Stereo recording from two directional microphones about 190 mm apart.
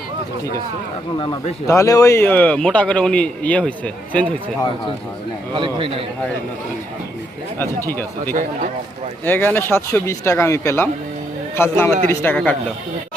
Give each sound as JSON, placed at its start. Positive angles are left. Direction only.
{"t": 1.6, "sound": "a man's voice", "side_deg": 15}
{"t": 5.5, "sound": "a man's voice", "side_deg": -25}
{"t": 7.6, "sound": "a man's voice", "side_deg": 10}
{"t": 9.2, "sound": "a man's voice", "side_deg": 10}